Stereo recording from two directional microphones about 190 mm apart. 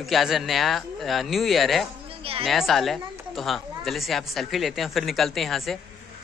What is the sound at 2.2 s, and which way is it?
Speech, 30° right (ahead or behind).